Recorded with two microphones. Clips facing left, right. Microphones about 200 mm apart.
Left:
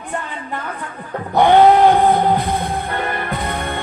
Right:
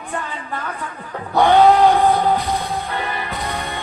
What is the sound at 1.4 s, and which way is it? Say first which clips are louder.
Music: left 2 dB; 20° left (ahead or behind).